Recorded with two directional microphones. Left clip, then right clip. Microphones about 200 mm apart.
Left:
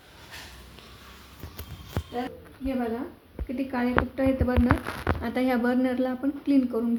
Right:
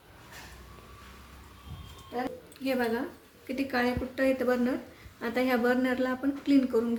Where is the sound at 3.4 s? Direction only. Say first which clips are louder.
Even; 30° left (ahead or behind).